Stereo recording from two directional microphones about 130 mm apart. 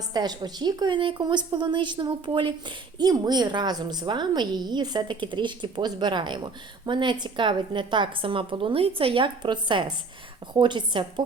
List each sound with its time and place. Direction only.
0.1 s a woman's voice: 30° right (ahead or behind)